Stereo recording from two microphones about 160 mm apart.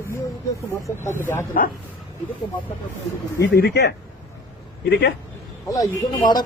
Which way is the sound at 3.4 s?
90° left.